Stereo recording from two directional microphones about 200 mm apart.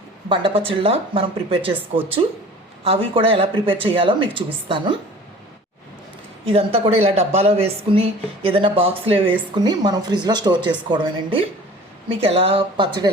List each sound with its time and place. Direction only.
0.3 s speech: 25° right (ahead or behind)
2.8 s speech: 30° right (ahead or behind)
6.5 s speech: 30° right (ahead or behind)